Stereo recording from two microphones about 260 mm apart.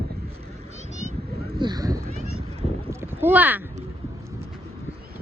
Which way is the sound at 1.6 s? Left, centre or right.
Centre.